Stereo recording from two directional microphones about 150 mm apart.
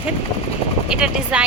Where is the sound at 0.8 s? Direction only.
5° right (ahead or behind).